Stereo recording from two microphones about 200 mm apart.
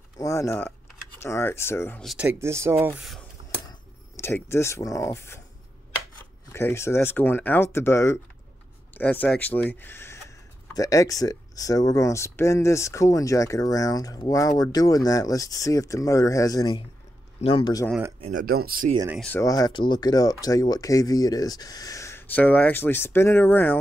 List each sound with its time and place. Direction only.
0.2 s speech: 15° left (ahead or behind)
2.0 s speech: 10° right (ahead or behind)
4.2 s speech: 10° left (ahead or behind)
6.5 s speech: 15° left (ahead or behind)
18.2 s speech: 45° right (ahead or behind)
19.1 s speech: 5° left (ahead or behind)
19.4 s speech: 20° left (ahead or behind)